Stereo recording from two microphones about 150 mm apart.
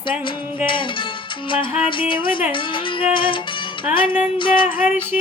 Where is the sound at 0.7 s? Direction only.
35° left (ahead or behind).